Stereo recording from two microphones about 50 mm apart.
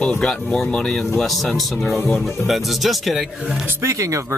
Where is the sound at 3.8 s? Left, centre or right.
Right.